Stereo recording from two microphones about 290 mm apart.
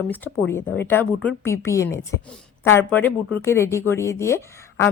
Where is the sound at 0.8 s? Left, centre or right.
Centre.